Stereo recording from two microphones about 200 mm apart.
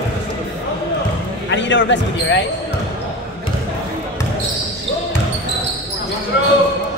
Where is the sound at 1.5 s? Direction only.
65° left (ahead or behind).